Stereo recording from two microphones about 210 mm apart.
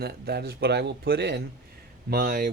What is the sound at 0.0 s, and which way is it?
Speech, 50° right (ahead or behind).